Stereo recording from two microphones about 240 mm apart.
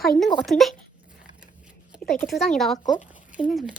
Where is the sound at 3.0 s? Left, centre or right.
Left.